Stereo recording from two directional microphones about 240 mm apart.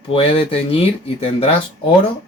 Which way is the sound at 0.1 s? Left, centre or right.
Left.